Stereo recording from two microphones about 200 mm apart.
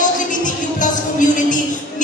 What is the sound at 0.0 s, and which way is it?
Music, 40° left (ahead or behind).